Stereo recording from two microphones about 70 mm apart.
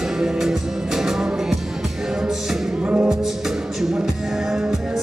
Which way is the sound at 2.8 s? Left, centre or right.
Centre.